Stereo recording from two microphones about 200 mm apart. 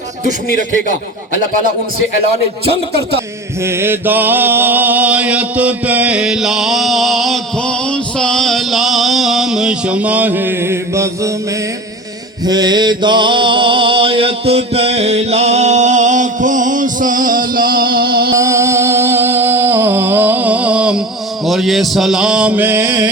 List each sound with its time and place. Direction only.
3.6 s mantra: 10° right (ahead or behind)
12.5 s mantra: 20° right (ahead or behind); by 18.3 s 50° right (ahead or behind)
18.3 s music: 15° right (ahead or behind)
21.4 s mantra: centre (ahead or behind)